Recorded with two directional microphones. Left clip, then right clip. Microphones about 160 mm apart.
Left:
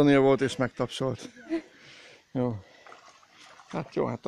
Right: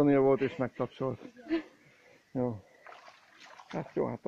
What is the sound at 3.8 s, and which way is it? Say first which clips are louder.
Speech: left 4 dB; 15° left (ahead or behind).